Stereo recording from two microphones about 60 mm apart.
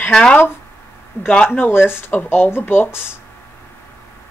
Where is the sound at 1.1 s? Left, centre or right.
Left.